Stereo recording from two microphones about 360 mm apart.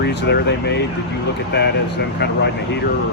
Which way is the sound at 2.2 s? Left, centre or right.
Left.